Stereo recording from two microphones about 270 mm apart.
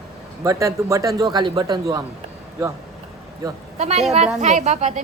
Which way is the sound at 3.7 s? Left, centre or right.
Right.